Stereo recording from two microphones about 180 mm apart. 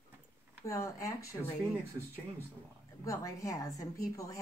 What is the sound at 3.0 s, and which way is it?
A woman's voice, 20° left (ahead or behind).